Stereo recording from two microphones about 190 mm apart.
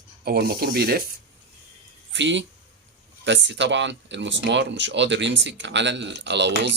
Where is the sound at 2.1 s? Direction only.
70° right (ahead or behind).